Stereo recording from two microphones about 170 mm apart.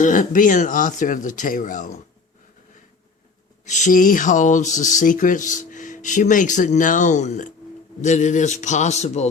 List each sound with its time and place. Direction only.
0.0 s speech: 50° left (ahead or behind)
3.7 s speech: 45° left (ahead or behind)